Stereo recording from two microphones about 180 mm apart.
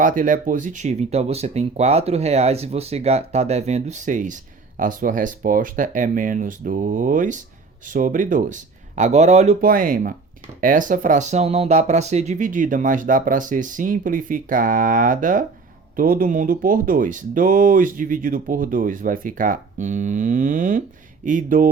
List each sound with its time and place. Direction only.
0.0 s speech: 45° right (ahead or behind)
9.6 s speech: 50° right (ahead or behind)